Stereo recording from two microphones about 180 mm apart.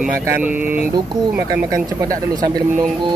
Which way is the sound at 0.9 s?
25° right (ahead or behind).